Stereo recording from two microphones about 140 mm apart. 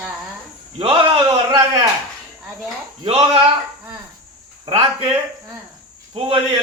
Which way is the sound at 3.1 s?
40° right (ahead or behind).